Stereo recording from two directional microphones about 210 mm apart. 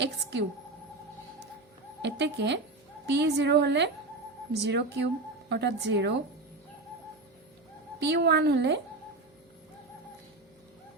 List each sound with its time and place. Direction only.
0.0 s a sound: 55° right (ahead or behind)
2.0 s a woman's voice: 55° right (ahead or behind)
7.9 s a woman's voice: 55° right (ahead or behind)